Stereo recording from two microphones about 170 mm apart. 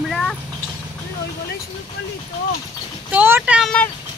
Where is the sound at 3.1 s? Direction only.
10° right (ahead or behind).